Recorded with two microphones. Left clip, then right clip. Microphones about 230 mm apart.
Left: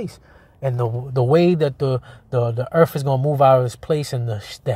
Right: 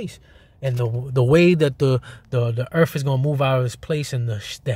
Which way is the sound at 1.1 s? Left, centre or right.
Centre.